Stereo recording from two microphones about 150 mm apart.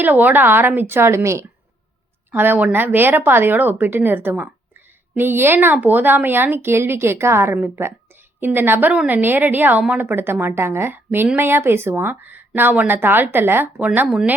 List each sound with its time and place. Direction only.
0.0 s a woman's voice: 10° right (ahead or behind)